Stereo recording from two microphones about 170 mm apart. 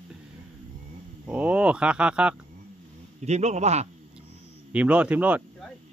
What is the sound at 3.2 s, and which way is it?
Speech, 40° right (ahead or behind).